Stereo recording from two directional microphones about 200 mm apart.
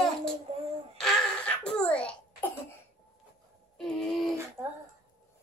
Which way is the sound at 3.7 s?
5° left (ahead or behind).